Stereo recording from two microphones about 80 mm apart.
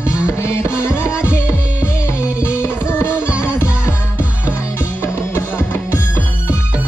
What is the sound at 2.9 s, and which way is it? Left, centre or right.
Music, left.